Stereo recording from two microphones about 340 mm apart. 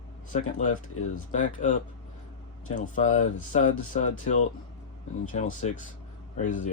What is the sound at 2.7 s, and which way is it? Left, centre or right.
Speech, left.